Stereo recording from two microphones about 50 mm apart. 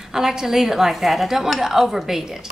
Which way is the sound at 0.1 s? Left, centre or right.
Centre.